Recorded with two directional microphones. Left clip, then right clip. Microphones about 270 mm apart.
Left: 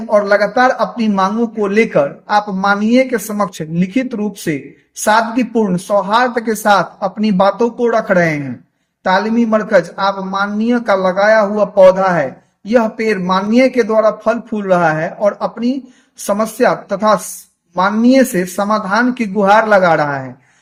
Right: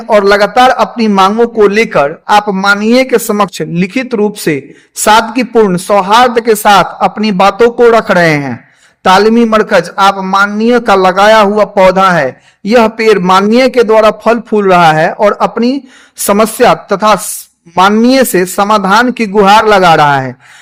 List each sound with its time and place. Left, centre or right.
0.1 s a man's voice: right